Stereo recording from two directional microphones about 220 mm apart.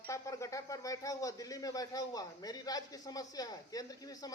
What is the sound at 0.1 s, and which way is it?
Speech, 15° left (ahead or behind).